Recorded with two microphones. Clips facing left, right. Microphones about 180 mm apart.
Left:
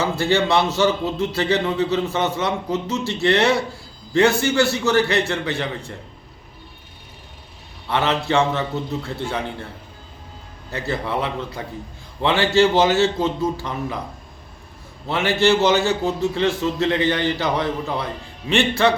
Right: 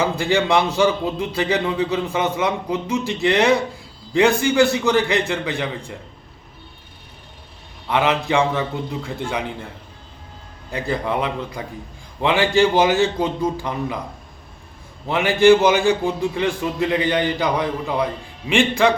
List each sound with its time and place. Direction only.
0.0 s a man's voice: 15° right (ahead or behind)
7.9 s a man's voice: 15° right (ahead or behind)
10.7 s a man's voice: 15° right (ahead or behind)
15.1 s a man's voice: 15° right (ahead or behind)